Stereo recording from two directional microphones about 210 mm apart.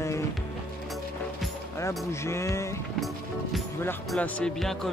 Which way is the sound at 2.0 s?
15° left (ahead or behind).